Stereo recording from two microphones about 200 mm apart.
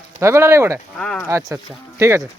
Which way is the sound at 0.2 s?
15° right (ahead or behind).